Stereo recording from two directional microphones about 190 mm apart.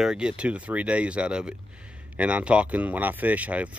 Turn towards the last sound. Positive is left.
turn(degrees=-5)  # may be behind; listen again after turning